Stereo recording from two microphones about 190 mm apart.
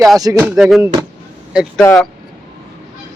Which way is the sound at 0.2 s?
20° right (ahead or behind).